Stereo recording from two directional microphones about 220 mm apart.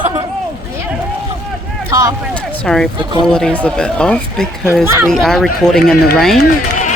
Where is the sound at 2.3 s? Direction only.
5° left (ahead or behind).